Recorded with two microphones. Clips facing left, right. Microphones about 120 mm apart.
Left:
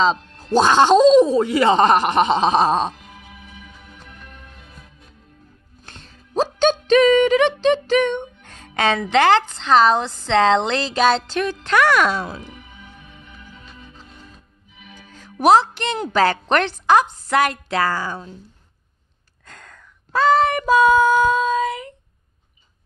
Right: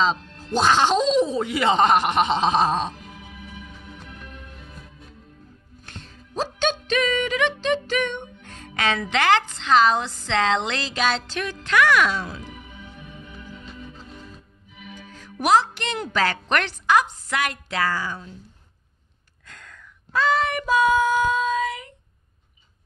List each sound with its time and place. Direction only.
0.0 s speech: 40° left (ahead or behind)
5.9 s music: 35° left (ahead or behind)
15.0 s music: 30° left (ahead or behind)
15.4 s speech: 30° left (ahead or behind)
19.4 s a sound: 40° left (ahead or behind)